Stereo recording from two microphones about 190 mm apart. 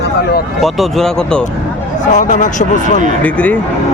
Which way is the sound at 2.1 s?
40° left (ahead or behind).